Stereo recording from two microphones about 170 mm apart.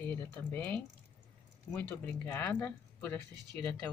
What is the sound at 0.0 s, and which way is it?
Speech, 10° left (ahead or behind).